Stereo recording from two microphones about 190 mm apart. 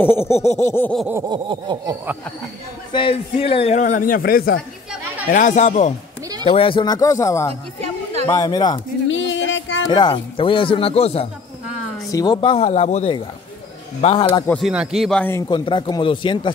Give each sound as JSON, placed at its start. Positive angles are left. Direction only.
{"t": 0.0, "sound": "a sound", "side_deg": 10}
{"t": 0.9, "sound": "a sound", "side_deg": -5}
{"t": 1.3, "sound": "a sound", "side_deg": -25}
{"t": 2.9, "sound": "a man's voice", "side_deg": 25}
{"t": 9.1, "sound": "music", "side_deg": 80}
{"t": 9.8, "sound": "speech", "side_deg": 20}
{"t": 12.1, "sound": "a woman's voice", "side_deg": 20}
{"t": 12.4, "sound": "a man's voice", "side_deg": 30}
{"t": 14.5, "sound": "speech", "side_deg": -5}
{"t": 15.3, "sound": "speech", "side_deg": 20}